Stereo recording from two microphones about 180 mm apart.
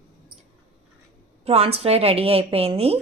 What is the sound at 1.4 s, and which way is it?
A woman's voice, 35° right (ahead or behind).